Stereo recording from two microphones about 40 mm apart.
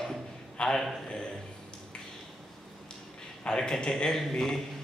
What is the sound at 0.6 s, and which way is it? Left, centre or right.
Speech, left.